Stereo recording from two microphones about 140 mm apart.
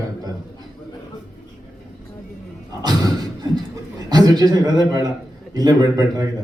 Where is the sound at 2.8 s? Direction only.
30° right (ahead or behind).